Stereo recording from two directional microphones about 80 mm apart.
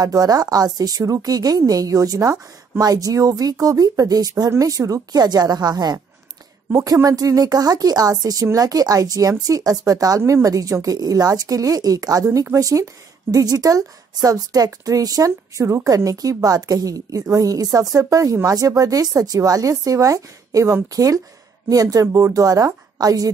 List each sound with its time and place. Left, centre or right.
0.0 s a woman's voice: right
6.7 s a woman's voice: right